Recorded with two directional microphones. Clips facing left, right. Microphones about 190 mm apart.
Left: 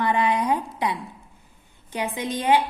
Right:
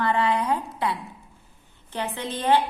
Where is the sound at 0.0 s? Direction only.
15° left (ahead or behind).